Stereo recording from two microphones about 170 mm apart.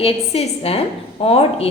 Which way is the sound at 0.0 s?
35° left (ahead or behind).